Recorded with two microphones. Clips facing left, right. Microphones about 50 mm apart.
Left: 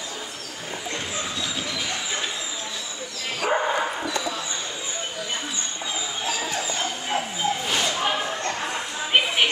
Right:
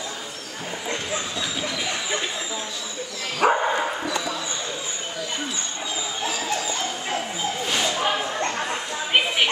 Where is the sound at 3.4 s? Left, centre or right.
Right.